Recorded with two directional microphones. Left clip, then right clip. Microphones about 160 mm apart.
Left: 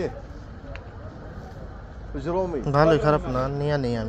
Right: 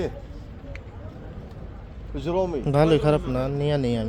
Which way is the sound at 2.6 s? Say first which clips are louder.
Left 2 dB; 45° right (ahead or behind).